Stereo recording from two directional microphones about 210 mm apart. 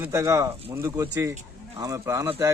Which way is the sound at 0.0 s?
15° right (ahead or behind).